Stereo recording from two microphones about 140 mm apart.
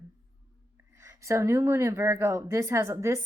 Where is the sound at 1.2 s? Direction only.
20° right (ahead or behind).